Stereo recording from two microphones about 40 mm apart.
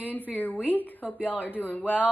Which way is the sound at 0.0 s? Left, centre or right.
Left.